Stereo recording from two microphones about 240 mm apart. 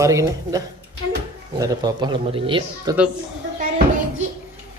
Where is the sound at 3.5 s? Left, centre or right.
Right.